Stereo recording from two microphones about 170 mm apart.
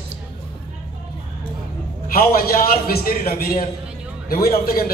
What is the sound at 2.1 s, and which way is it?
A man's voice, 60° left (ahead or behind).